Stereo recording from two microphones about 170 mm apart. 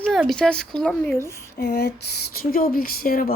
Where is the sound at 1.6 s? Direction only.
80° left; by 3.3 s 60° left (ahead or behind).